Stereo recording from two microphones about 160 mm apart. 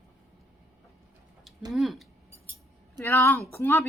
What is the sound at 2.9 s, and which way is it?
Speech, 15° left (ahead or behind).